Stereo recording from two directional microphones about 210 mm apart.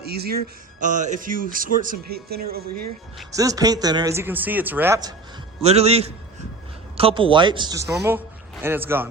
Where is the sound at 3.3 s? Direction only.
15° right (ahead or behind).